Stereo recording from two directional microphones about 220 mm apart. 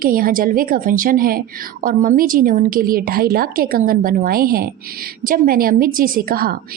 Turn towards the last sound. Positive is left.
turn(degrees=-40)  # may be behind; listen again after turning